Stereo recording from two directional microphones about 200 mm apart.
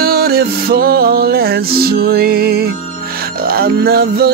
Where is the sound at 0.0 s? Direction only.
50° right (ahead or behind).